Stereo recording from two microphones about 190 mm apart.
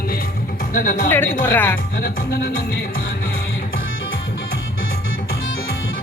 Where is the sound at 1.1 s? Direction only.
10° left (ahead or behind).